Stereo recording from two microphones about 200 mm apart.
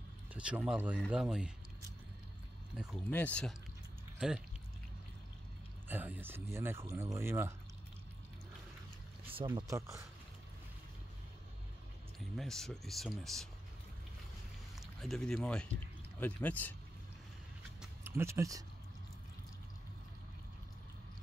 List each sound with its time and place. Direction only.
0.3 s speech: 5° right (ahead or behind)
2.7 s speech: centre (ahead or behind)
3.1 s speech: 10° left (ahead or behind)
5.9 s speech: 10° right (ahead or behind)
9.6 s speech: 15° right (ahead or behind)
12.4 s speech: centre (ahead or behind)
14.8 s speech: centre (ahead or behind)
18.0 s speech: 10° right (ahead or behind)